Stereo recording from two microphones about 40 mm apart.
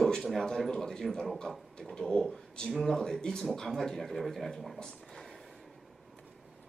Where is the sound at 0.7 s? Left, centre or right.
Centre.